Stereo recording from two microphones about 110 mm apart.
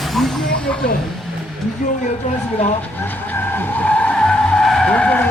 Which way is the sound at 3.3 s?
20° left (ahead or behind).